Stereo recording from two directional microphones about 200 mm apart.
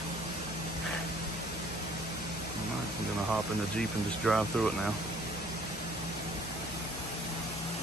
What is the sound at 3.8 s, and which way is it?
Speech, centre (ahead or behind).